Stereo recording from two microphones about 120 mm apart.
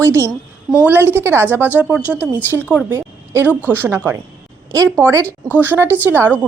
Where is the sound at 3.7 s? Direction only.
15° right (ahead or behind).